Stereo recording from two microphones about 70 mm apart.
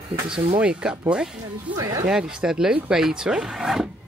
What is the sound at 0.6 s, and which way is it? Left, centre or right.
Speech, centre.